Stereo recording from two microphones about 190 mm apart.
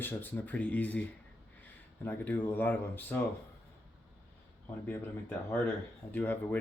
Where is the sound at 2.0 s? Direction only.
10° left (ahead or behind).